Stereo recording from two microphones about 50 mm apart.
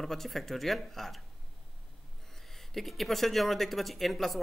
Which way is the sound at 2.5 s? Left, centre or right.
Centre.